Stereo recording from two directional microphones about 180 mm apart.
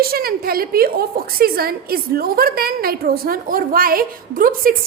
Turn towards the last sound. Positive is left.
turn(degrees=-50)  # may be behind; listen again after turning